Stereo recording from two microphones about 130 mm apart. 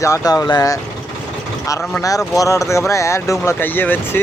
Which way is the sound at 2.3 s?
25° left (ahead or behind).